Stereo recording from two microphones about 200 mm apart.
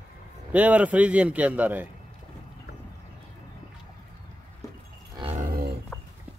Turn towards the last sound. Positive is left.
turn(degrees=15)  # may be behind; listen again after turning